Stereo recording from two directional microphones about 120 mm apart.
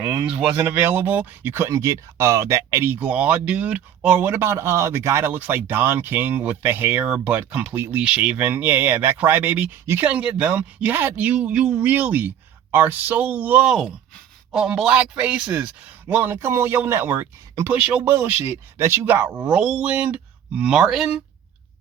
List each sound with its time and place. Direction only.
0.0 s speech: 10° right (ahead or behind)